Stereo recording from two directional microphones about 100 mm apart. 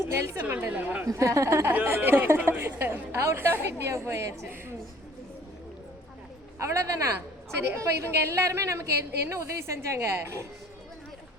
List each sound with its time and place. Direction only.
0.0 s a woman's voice: 25° right (ahead or behind)
0.4 s a woman's voice: 15° right (ahead or behind)
1.0 s speech: 30° right (ahead or behind)
6.6 s speech: 30° right (ahead or behind)